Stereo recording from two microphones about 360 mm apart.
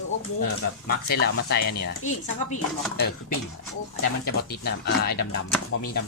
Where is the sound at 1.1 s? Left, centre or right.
Left.